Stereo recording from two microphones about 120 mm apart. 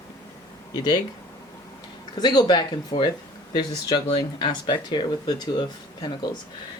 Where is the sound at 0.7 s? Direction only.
35° left (ahead or behind).